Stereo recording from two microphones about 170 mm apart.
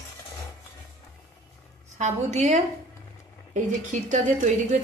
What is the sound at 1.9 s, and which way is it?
A woman's voice, 40° right (ahead or behind).